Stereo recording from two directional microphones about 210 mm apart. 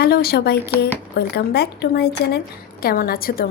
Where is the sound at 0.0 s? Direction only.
45° left (ahead or behind).